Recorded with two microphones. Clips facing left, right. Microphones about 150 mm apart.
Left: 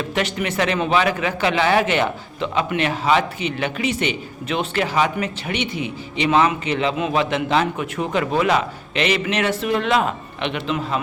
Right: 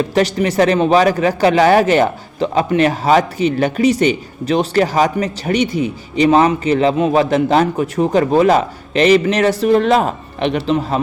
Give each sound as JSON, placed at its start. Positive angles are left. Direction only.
{"t": 0.1, "sound": "speech", "side_deg": -35}